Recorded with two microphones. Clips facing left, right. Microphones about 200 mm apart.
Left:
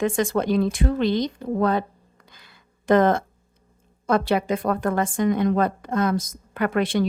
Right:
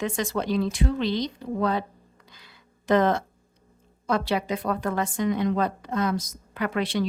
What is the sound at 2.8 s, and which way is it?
A woman's voice, 50° left (ahead or behind).